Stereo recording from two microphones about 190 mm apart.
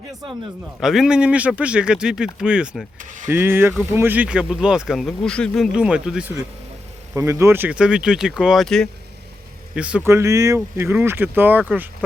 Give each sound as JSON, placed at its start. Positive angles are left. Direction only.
{"t": 0.8, "sound": "speech", "side_deg": 0}
{"t": 3.0, "sound": "speech", "side_deg": -40}
{"t": 3.2, "sound": "speech", "side_deg": -10}